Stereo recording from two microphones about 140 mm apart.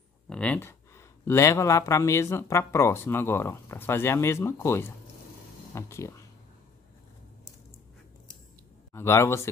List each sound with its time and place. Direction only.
0.3 s speech: 10° left (ahead or behind)
8.9 s speech: 20° left (ahead or behind)